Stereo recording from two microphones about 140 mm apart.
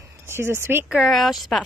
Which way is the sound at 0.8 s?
5° right (ahead or behind).